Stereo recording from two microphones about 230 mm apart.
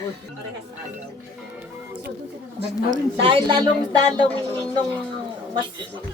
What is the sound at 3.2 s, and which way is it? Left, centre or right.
A woman's voice, right.